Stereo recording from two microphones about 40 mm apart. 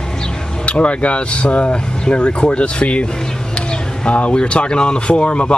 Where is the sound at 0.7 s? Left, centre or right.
Left.